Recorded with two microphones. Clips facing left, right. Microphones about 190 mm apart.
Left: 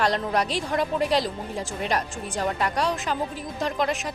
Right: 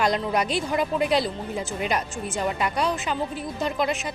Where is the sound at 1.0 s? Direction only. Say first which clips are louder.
Right 1 dB; 40° left (ahead or behind).